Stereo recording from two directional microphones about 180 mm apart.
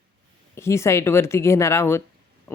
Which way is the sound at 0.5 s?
15° left (ahead or behind).